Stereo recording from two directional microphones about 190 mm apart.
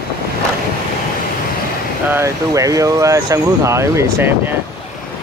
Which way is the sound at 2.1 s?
15° right (ahead or behind).